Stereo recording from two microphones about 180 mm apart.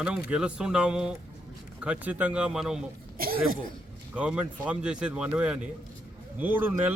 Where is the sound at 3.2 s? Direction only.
55° right (ahead or behind).